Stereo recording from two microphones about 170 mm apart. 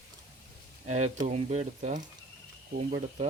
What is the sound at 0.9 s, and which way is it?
Speech, 40° right (ahead or behind).